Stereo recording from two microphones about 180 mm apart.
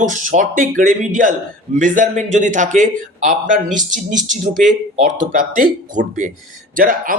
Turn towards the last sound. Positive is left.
turn(degrees=-50)  # may be behind; listen again after turning